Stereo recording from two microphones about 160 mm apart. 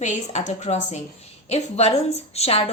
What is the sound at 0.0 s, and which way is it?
A woman's voice, 45° left (ahead or behind).